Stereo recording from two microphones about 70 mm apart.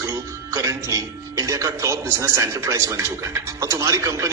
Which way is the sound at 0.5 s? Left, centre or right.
Right.